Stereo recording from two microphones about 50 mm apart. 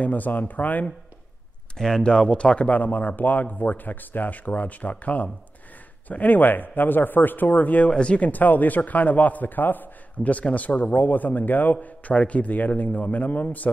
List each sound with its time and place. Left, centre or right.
0.0 s a man's voice: left
1.8 s speech: centre
2.7 s a man's voice: left
7.9 s speech: centre
8.2 s a man's voice: left